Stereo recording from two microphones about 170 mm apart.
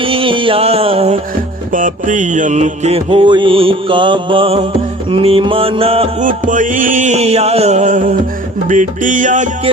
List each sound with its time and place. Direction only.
0.0 s a sound: 30° right (ahead or behind)
1.7 s mantra: 50° right (ahead or behind); by 6.1 s 35° right (ahead or behind)
6.1 s music: 50° right (ahead or behind)